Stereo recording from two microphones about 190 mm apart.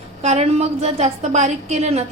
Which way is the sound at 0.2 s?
35° right (ahead or behind).